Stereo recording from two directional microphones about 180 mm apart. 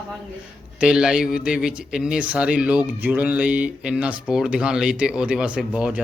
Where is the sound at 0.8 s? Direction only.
5° right (ahead or behind).